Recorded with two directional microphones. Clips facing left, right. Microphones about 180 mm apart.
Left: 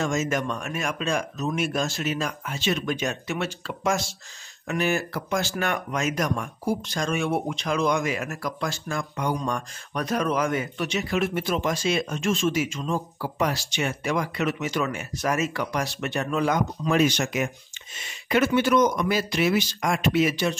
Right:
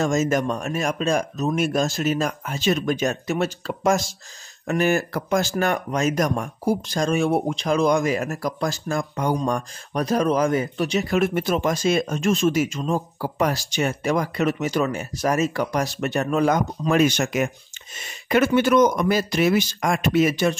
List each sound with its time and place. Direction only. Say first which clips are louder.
0.0 s speech: right 5 dB; 40° right (ahead or behind)